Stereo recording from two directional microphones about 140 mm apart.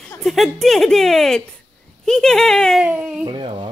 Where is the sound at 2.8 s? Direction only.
5° right (ahead or behind).